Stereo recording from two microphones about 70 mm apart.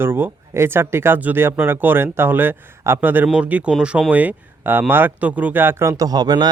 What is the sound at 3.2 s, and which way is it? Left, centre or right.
Speech, centre.